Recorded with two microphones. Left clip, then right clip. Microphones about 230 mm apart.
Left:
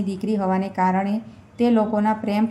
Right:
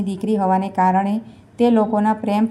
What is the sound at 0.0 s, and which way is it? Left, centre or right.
A woman's voice, centre.